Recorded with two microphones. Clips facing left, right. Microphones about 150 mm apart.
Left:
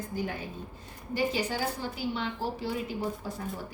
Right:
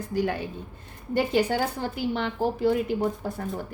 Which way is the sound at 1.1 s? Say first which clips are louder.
Right 6 dB; 60° right (ahead or behind).